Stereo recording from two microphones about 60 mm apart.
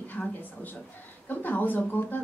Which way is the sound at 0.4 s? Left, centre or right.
Left.